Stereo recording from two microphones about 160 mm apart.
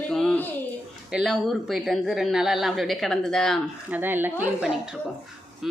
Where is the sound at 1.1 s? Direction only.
Centre (ahead or behind).